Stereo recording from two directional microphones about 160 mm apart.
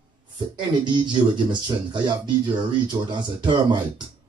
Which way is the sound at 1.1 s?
30° right (ahead or behind).